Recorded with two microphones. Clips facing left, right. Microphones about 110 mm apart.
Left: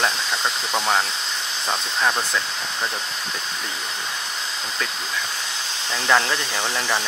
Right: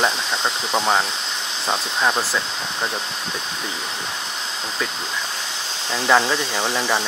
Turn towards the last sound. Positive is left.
turn(degrees=-10)  # may be behind; listen again after turning